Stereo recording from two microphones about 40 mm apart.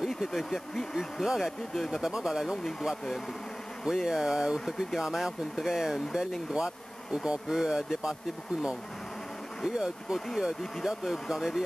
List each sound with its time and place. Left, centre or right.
0.2 s speech: centre
1.2 s speech: centre
2.0 s speech: centre
3.8 s speech: centre
9.7 s speech: centre